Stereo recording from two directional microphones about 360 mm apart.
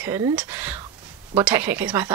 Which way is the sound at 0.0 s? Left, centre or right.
Centre.